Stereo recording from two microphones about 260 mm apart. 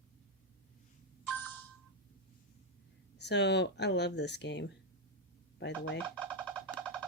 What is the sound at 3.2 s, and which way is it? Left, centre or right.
Speech, left.